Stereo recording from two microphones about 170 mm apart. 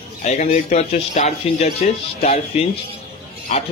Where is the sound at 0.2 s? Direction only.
40° left (ahead or behind).